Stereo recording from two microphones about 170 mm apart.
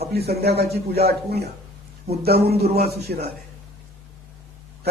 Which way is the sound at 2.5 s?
40° right (ahead or behind).